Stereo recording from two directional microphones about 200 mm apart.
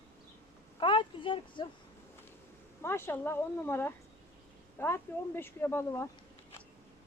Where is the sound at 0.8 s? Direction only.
25° left (ahead or behind).